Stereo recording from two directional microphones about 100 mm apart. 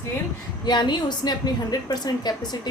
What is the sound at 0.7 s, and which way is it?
A woman's voice, 45° left (ahead or behind).